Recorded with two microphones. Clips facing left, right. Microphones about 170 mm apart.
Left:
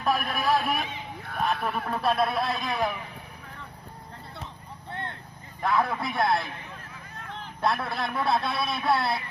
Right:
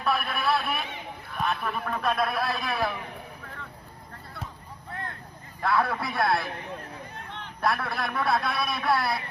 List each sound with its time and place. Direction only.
0.0 s a man's voice: 40° left (ahead or behind); by 2.9 s 20° left (ahead or behind)
4.9 s vehicle: 30° left (ahead or behind)
5.6 s a man's voice: 20° left (ahead or behind)
7.6 s a man's voice: 25° left (ahead or behind)